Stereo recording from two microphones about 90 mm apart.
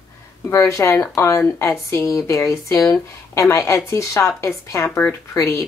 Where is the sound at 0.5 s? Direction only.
35° left (ahead or behind).